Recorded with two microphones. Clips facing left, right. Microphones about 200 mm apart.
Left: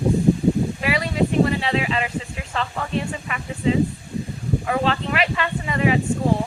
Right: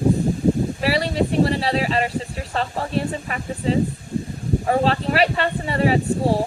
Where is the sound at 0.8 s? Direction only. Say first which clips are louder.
Right 4 dB; 35° right (ahead or behind).